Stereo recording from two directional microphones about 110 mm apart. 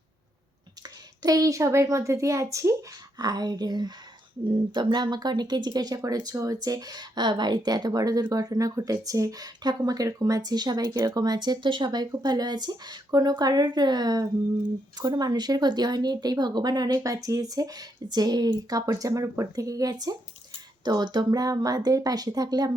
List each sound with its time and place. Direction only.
0.8 s a woman's voice: 35° right (ahead or behind)